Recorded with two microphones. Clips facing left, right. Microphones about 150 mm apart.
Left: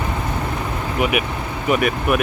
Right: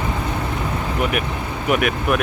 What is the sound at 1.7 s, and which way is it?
Speech, 5° right (ahead or behind).